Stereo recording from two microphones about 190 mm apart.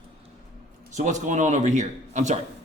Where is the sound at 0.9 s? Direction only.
40° right (ahead or behind).